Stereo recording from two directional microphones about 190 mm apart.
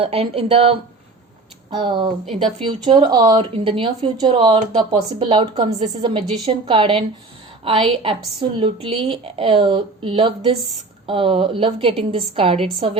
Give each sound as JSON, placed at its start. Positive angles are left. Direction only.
{"t": 0.0, "sound": "speech", "side_deg": -30}
{"t": 1.8, "sound": "a woman's voice", "side_deg": -25}